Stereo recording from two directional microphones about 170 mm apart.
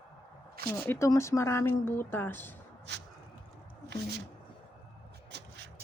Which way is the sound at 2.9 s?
90° right.